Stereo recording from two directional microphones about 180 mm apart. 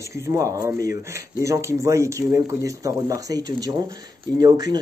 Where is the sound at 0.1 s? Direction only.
15° right (ahead or behind).